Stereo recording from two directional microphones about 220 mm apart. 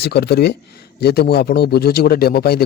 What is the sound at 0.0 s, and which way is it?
A man's voice, 50° left (ahead or behind).